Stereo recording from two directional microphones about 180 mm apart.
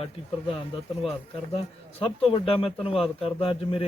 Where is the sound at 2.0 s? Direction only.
30° left (ahead or behind).